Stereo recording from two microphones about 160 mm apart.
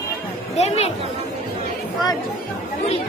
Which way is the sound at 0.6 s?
40° left (ahead or behind).